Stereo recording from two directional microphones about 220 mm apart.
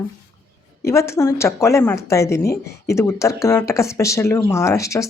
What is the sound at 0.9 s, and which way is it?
Speech, 10° left (ahead or behind).